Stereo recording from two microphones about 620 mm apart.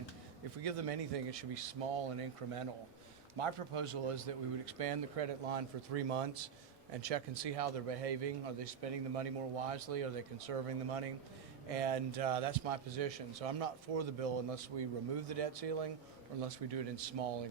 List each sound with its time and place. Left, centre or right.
0.6 s speech: right
3.3 s speech: right